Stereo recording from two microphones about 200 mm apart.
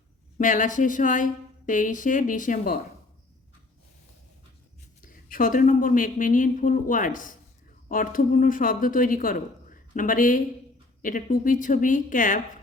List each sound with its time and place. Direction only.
0.3 s a woman's voice: 40° left (ahead or behind)
5.0 s a woman's voice: 45° left (ahead or behind)